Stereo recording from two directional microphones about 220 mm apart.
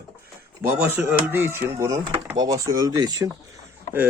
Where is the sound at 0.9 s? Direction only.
10° right (ahead or behind).